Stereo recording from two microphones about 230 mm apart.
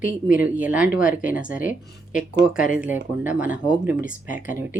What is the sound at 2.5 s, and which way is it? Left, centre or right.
Speech, left.